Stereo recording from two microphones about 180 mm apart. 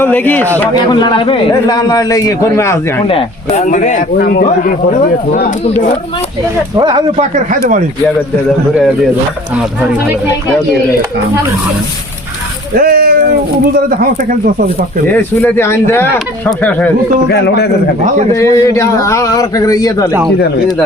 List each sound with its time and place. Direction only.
0.0 s a man's voice: 10° left (ahead or behind)
0.7 s a man's voice: 25° left (ahead or behind)
3.1 s speech: 35° left (ahead or behind)
6.7 s speech: 25° right (ahead or behind)
12.7 s speech: 55° right (ahead or behind)
15.0 s a man's voice: 10° left (ahead or behind)
17.2 s a man's voice: 65° left (ahead or behind)
18.3 s a man's voice: 15° left (ahead or behind)